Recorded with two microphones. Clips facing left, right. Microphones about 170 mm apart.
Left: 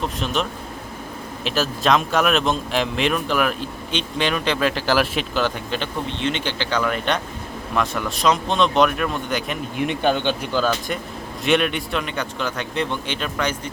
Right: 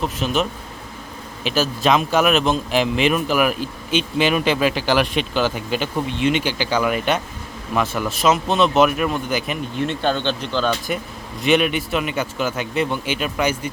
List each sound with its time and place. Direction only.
0.0 s speech: 5° right (ahead or behind)
1.5 s speech: centre (ahead or behind)
9.7 s speech: 15° left (ahead or behind); by 13.6 s 10° right (ahead or behind)